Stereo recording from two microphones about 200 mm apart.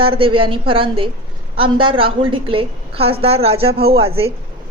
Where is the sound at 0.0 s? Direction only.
25° right (ahead or behind).